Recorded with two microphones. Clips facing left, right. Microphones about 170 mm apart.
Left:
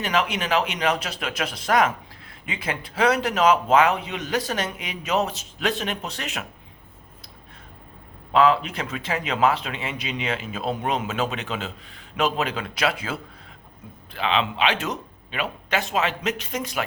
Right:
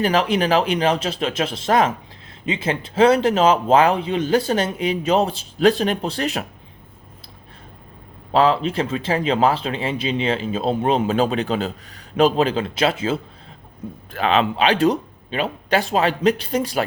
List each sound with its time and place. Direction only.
0.0 s speech: 35° right (ahead or behind)
8.3 s speech: 30° right (ahead or behind)
14.1 s speech: 45° right (ahead or behind)